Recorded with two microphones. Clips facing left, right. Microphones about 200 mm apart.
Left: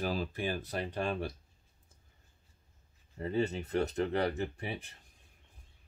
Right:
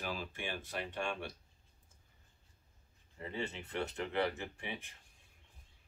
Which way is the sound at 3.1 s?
40° left (ahead or behind).